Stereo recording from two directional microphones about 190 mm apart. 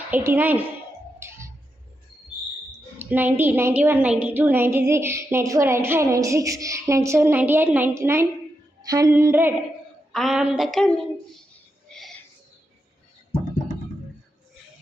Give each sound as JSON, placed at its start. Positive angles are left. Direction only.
{"t": 0.1, "sound": "a woman's voice", "side_deg": -10}
{"t": 3.0, "sound": "a woman's voice", "side_deg": -10}
{"t": 10.1, "sound": "a woman's voice", "side_deg": 0}
{"t": 11.9, "sound": "a sound", "side_deg": 0}